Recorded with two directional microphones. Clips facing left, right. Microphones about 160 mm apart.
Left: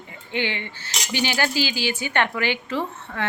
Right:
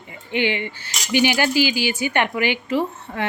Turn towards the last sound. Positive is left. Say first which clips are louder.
# right 4 dB
turn(degrees=-15)  # may be behind; listen again after turning